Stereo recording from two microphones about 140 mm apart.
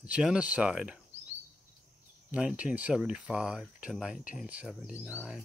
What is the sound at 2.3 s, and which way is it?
Speech, 10° right (ahead or behind).